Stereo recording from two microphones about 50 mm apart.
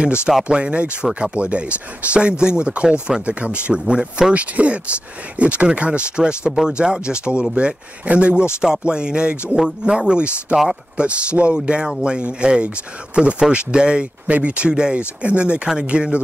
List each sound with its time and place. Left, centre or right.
0.0 s speech: right
3.8 s speech: centre